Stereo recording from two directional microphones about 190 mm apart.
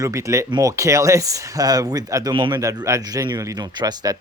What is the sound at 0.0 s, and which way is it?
Speech, 15° right (ahead or behind).